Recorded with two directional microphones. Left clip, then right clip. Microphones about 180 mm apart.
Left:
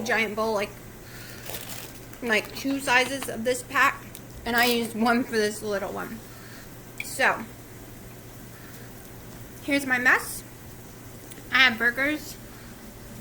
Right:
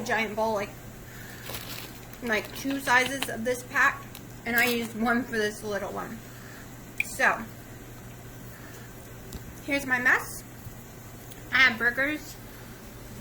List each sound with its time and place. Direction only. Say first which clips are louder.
0.0 s speech: left 2 dB; 30° left (ahead or behind)
2.2 s a woman's voice: left 4 dB; 25° left (ahead or behind)
7.3 s a woman's voice: left 1 dB; 25° left (ahead or behind)
9.6 s speech: left 2 dB; 30° left (ahead or behind)
11.5 s a woman's voice: left 1 dB; 25° left (ahead or behind)